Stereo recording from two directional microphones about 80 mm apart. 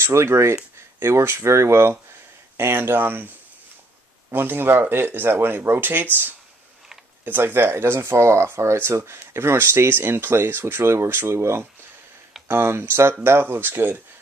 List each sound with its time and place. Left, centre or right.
0.0 s speech: right
4.3 s speech: right
7.2 s speech: right